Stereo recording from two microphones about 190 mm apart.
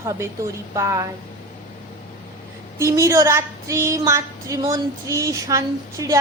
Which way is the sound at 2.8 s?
15° right (ahead or behind).